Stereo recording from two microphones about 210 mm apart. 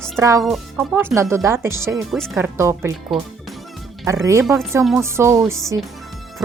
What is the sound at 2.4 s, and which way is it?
Speech, 15° right (ahead or behind).